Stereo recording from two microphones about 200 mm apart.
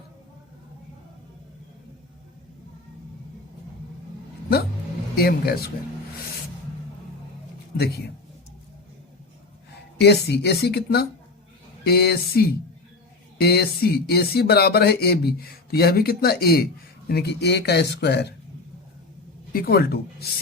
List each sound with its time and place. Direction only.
5.1 s speech: 50° left (ahead or behind)
7.8 s speech: 55° left (ahead or behind)
10.0 s a man's voice: 55° left (ahead or behind)
19.5 s speech: 50° left (ahead or behind)